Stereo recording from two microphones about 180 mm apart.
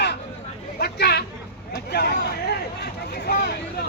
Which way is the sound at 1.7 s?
65° left (ahead or behind).